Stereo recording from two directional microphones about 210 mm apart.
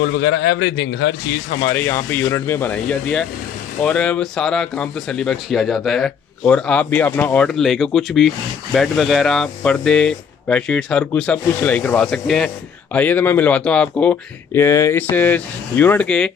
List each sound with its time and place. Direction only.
0.0 s a man's voice: 50° left (ahead or behind)
1.6 s speech: 10° left (ahead or behind)